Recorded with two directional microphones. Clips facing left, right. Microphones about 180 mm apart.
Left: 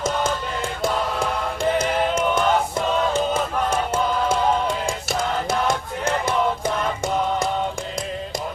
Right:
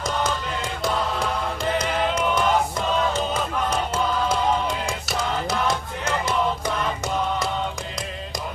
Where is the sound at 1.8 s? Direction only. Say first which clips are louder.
Left 2 dB; 25° left (ahead or behind).